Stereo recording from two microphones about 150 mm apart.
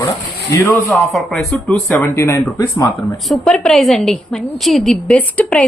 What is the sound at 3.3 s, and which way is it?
A woman's voice, centre (ahead or behind).